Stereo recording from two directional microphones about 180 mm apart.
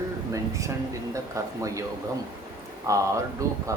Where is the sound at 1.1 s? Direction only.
15° right (ahead or behind).